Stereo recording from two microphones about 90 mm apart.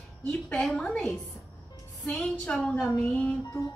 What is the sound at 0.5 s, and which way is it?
Female singing, 5° left (ahead or behind).